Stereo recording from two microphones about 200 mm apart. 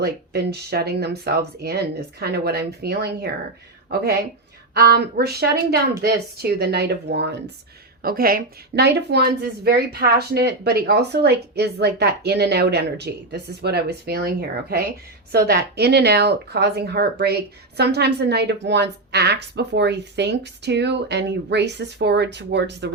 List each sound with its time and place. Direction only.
0.0 s speech: 55° right (ahead or behind)
8.0 s speech: 45° right (ahead or behind)